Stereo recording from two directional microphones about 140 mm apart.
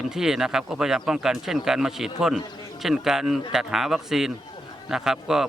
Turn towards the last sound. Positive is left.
turn(degrees=-5)  # may be behind; listen again after turning